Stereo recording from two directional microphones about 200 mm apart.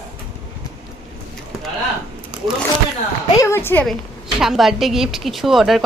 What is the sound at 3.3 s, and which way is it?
Speech, 15° left (ahead or behind).